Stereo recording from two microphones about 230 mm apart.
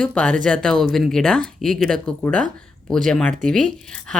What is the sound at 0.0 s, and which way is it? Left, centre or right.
A woman's voice, centre.